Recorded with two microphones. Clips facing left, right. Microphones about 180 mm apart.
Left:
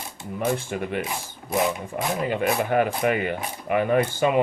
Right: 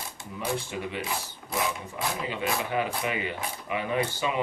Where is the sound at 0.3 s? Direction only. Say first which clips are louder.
Left 6 dB; 50° left (ahead or behind).